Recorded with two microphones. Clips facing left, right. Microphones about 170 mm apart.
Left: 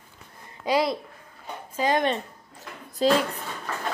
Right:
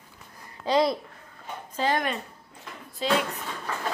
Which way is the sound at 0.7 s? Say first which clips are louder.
Right 1 dB; 10° left (ahead or behind).